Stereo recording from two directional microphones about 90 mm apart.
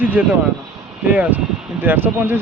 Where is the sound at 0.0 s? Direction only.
20° right (ahead or behind).